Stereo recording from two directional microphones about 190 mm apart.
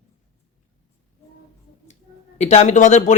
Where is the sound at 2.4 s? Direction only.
35° left (ahead or behind).